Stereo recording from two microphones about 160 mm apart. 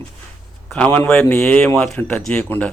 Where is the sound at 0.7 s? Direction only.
10° left (ahead or behind).